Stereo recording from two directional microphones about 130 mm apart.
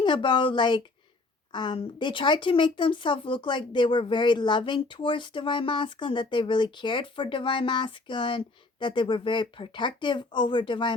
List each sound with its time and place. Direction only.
0.0 s speech: 40° left (ahead or behind)